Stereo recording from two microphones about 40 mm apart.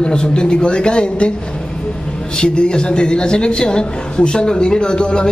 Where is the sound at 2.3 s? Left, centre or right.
Left.